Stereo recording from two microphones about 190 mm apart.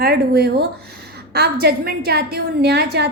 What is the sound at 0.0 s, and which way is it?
A woman's voice, 55° right (ahead or behind).